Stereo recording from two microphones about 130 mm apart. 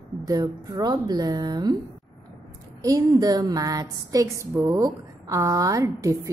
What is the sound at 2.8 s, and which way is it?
A woman's voice, 25° right (ahead or behind).